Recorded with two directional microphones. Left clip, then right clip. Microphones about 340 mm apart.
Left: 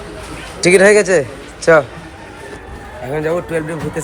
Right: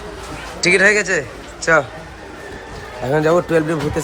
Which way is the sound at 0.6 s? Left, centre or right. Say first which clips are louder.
Left 4 dB; centre.